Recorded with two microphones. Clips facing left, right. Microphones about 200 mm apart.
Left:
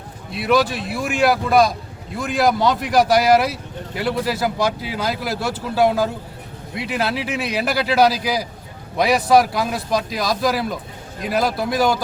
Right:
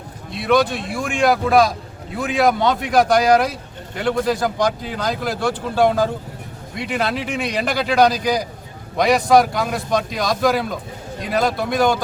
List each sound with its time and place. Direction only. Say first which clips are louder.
0.3 s speech: right 1 dB; 5° left (ahead or behind)